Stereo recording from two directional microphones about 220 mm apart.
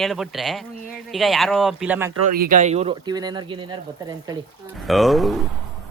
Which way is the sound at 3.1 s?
20° right (ahead or behind).